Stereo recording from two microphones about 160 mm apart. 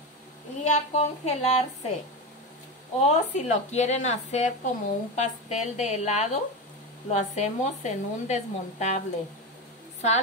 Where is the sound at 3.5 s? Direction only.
45° left (ahead or behind).